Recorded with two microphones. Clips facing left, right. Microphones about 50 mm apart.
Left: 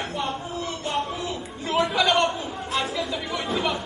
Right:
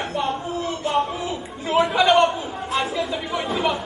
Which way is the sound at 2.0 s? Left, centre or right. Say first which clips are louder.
Right 5 dB; centre.